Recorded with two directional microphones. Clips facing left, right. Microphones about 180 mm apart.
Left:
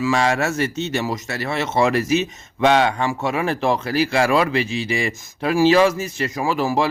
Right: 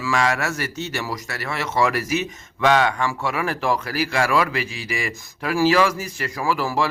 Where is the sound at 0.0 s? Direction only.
25° left (ahead or behind).